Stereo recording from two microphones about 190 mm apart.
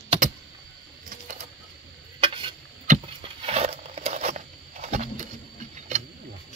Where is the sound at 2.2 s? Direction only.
25° right (ahead or behind).